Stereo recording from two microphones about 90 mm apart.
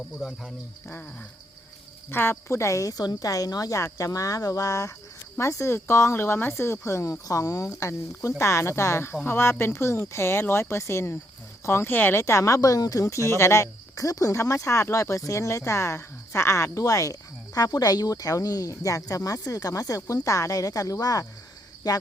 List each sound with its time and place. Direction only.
0.2 s speech: centre (ahead or behind)
2.0 s speech: 25° left (ahead or behind)
12.2 s speech: 35° left (ahead or behind)
21.8 s jingle bell: 45° left (ahead or behind)